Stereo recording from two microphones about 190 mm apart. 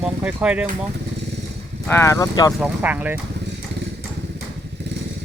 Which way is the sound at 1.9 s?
15° left (ahead or behind).